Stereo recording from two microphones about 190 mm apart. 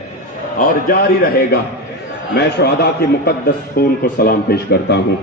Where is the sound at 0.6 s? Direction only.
50° left (ahead or behind).